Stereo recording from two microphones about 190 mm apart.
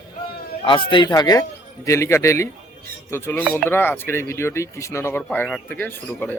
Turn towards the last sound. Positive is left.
turn(degrees=10)  # may be behind; listen again after turning